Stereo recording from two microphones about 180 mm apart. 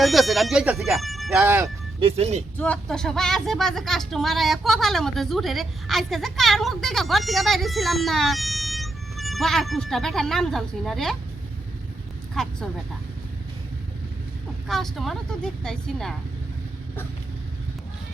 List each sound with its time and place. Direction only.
0.0 s speech: centre (ahead or behind)
2.0 s speech: 30° right (ahead or behind)
2.6 s speech: 5° left (ahead or behind)
12.3 s speech: centre (ahead or behind)
14.7 s speech: centre (ahead or behind)